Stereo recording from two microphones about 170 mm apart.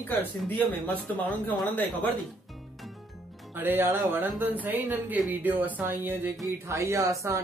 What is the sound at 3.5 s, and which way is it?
Speech, 10° right (ahead or behind).